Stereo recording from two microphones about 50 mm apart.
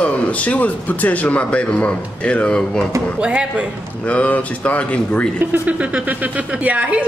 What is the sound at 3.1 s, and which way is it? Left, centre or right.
Speech, right.